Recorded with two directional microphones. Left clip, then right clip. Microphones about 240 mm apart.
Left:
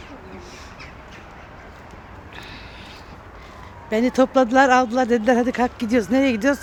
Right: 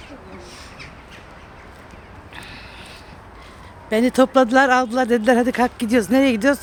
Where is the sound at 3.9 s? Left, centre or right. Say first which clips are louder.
Right 2 dB; centre.